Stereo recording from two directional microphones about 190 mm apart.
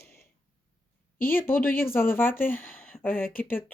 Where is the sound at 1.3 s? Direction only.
10° left (ahead or behind).